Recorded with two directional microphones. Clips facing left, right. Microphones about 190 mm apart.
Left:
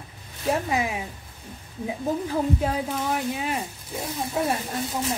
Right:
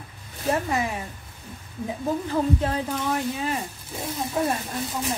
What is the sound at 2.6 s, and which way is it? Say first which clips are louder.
Speech: even; 5° left (ahead or behind).